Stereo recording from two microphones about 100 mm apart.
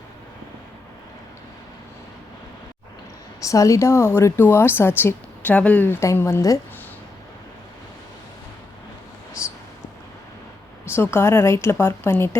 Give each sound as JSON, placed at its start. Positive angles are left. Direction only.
{"t": 3.4, "sound": "a woman's voice", "side_deg": 35}
{"t": 10.8, "sound": "a woman's voice", "side_deg": 25}